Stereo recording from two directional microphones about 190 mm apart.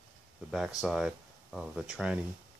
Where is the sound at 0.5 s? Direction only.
Centre (ahead or behind).